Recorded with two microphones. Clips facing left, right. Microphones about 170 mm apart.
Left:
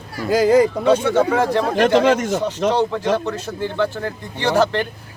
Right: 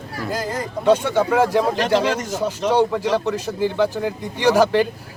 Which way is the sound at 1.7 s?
55° left (ahead or behind).